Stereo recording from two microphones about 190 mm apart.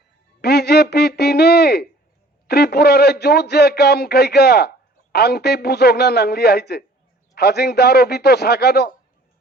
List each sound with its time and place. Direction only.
0.4 s a man's voice: 55° left (ahead or behind)